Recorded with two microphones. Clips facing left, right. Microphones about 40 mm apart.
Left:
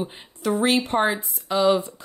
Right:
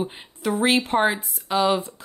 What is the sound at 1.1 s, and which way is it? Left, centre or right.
Speech, right.